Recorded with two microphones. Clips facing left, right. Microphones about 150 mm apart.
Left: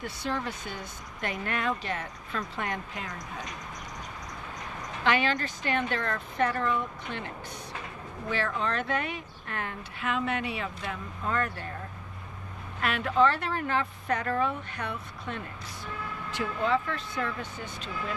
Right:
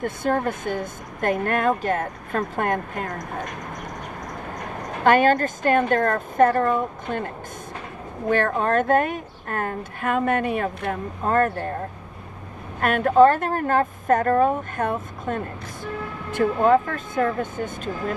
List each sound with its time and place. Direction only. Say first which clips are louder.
0.0 s speech: right 10 dB; 50° right (ahead or behind)
12.8 s speech: right 9 dB; 50° right (ahead or behind)